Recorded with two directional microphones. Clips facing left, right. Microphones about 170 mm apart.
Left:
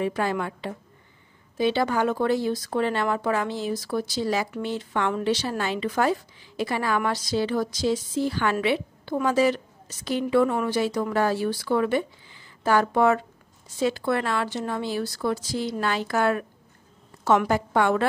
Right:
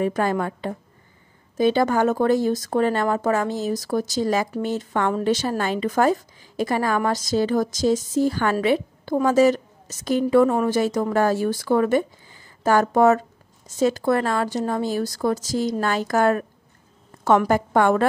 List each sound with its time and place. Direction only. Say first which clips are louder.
0.0 s speech: right 4 dB; 45° right (ahead or behind)